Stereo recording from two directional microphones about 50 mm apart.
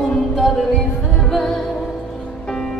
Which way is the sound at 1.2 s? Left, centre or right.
Centre.